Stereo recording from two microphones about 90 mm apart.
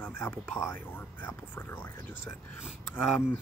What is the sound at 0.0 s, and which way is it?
Speech, 20° left (ahead or behind).